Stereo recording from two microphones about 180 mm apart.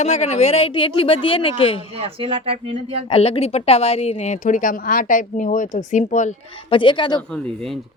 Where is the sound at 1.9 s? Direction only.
30° right (ahead or behind).